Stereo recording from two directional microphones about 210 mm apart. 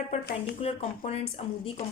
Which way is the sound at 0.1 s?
45° left (ahead or behind).